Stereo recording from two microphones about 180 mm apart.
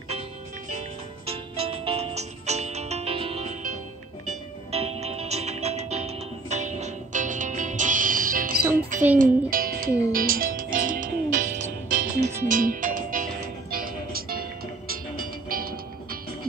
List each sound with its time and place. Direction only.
0.7 s music: 35° right (ahead or behind)
4.6 s music: 35° right (ahead or behind); by 14.4 s 55° right (ahead or behind)
15.5 s music: 55° right (ahead or behind)